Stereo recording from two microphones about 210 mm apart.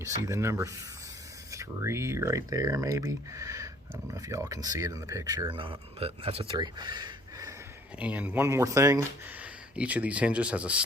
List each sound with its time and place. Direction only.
0.3 s speech: 15° right (ahead or behind)
7.9 s speech: 5° right (ahead or behind)